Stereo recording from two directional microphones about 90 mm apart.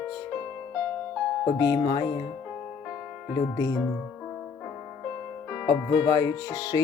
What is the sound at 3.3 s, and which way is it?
Speech, 35° left (ahead or behind).